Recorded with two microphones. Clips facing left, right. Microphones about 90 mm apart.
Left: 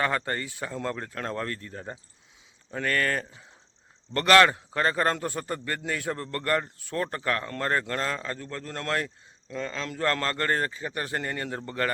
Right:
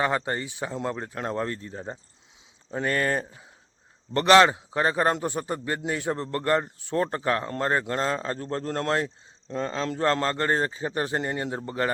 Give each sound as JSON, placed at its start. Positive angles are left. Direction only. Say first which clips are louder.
{"t": 0.0, "sound": "a man's voice", "louder": "right 2 dB", "side_deg": -15}